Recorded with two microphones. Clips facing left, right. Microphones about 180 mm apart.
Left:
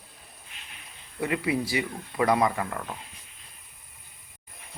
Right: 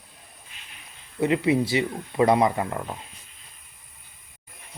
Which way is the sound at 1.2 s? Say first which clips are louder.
Right 6 dB; 25° right (ahead or behind).